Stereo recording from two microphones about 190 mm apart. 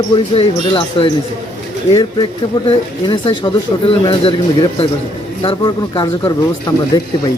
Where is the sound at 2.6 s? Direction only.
30° left (ahead or behind).